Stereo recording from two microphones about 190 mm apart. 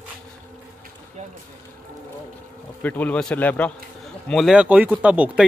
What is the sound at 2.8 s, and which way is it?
Speech, 10° left (ahead or behind).